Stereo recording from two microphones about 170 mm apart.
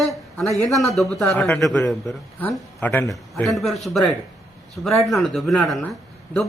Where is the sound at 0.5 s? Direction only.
Centre (ahead or behind).